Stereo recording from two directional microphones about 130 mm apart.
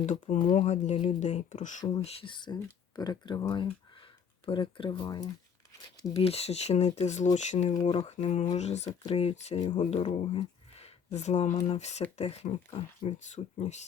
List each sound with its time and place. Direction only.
0.0 s speech: 70° left (ahead or behind)
2.0 s speech: 40° left (ahead or behind)
6.1 s speech: 50° left (ahead or behind)
7.9 s speech: 55° left (ahead or behind)
9.6 s speech: 40° left (ahead or behind)
9.9 s speech: 55° left (ahead or behind)